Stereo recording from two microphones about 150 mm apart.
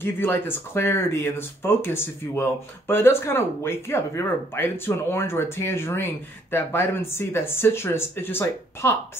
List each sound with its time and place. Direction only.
0.0 s speech: 15° left (ahead or behind)